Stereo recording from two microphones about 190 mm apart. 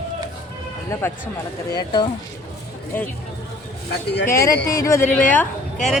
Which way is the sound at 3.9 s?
60° left (ahead or behind).